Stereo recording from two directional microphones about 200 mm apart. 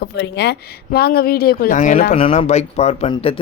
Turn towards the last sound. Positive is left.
turn(degrees=25)  # may be behind; listen again after turning